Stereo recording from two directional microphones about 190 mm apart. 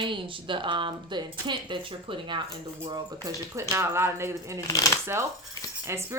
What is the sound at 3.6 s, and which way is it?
Speech, 15° right (ahead or behind).